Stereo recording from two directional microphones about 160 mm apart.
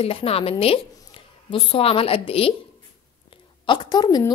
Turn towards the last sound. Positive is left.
turn(degrees=25)  # may be behind; listen again after turning